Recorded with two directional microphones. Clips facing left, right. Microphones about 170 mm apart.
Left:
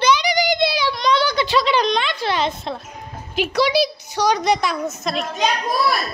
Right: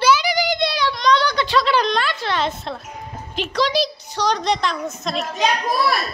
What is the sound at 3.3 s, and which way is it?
A woman's voice, 5° left (ahead or behind).